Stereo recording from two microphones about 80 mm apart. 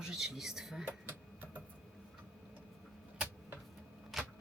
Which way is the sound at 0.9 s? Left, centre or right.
Right.